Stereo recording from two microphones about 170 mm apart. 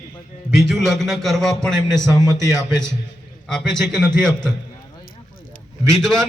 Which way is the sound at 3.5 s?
5° left (ahead or behind).